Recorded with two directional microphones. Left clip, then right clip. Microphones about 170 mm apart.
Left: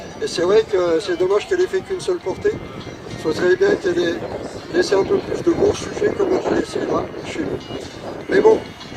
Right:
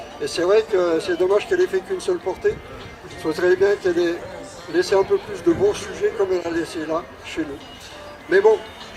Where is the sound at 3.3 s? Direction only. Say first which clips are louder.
Left 1 dB; 55° right (ahead or behind).